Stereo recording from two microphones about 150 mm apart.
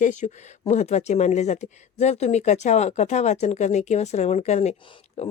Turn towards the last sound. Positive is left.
turn(degrees=50)  # may be behind; listen again after turning